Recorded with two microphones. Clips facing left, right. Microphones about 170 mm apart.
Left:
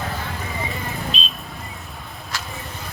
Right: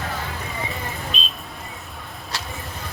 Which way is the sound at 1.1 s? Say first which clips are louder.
Left 1 dB; 50° right (ahead or behind).